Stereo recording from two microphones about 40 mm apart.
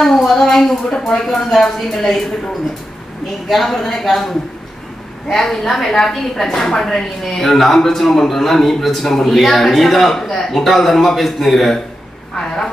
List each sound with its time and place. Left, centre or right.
0.0 s a sound: centre
0.9 s speech: left
1.8 s speech: centre
3.4 s a woman's voice: centre